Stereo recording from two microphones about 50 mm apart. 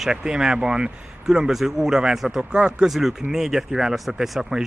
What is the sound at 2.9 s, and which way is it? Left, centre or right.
Speech, centre.